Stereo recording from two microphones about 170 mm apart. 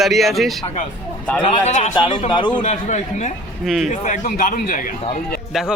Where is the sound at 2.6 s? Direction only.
45° left (ahead or behind).